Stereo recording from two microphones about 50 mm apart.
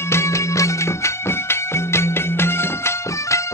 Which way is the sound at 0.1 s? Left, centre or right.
Left.